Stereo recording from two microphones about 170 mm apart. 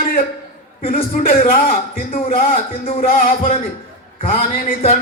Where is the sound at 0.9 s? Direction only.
60° left (ahead or behind).